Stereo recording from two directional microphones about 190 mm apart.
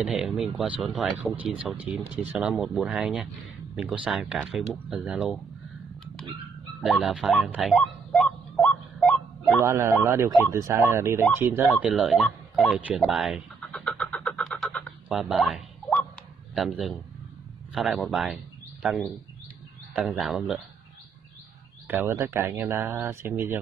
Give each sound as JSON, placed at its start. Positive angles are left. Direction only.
{"t": 0.0, "sound": "speech", "side_deg": 0}
{"t": 6.8, "sound": "a sound", "side_deg": 0}
{"t": 9.6, "sound": "speech", "side_deg": -15}
{"t": 11.6, "sound": "a sound", "side_deg": 0}
{"t": 16.5, "sound": "a man's voice", "side_deg": 0}
{"t": 21.8, "sound": "speech", "side_deg": -10}